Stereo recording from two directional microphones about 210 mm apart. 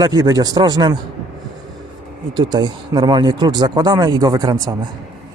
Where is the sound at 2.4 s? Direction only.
20° right (ahead or behind).